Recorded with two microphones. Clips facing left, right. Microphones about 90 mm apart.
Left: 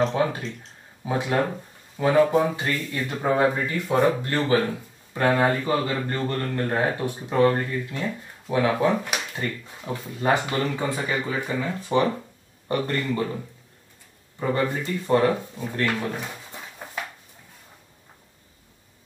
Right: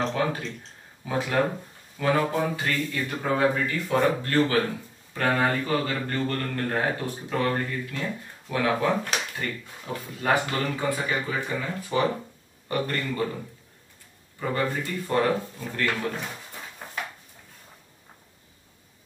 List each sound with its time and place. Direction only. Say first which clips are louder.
0.1 s speech: left 3 dB; 20° left (ahead or behind)
9.9 s speech: left 2 dB; 30° left (ahead or behind)
14.4 s speech: left 3 dB; 25° left (ahead or behind)
16.5 s a sound: left 1 dB; 20° left (ahead or behind)